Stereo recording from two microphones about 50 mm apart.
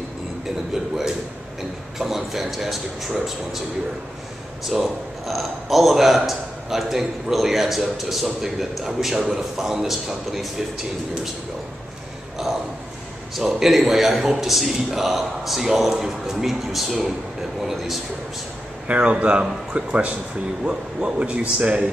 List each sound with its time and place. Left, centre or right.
2.0 s a man's voice: centre
4.6 s a man's voice: centre
13.4 s a man's voice: centre
18.9 s speech: right